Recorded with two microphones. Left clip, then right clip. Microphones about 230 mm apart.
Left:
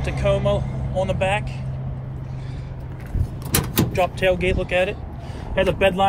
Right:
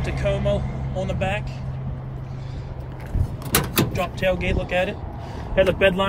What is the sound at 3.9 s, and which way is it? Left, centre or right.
Speech, left.